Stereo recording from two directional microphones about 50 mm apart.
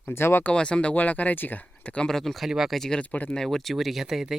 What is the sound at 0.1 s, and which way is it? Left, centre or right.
Speech, left.